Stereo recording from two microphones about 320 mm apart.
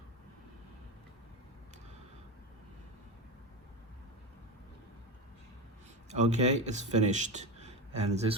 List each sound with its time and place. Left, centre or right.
6.1 s a man's voice: right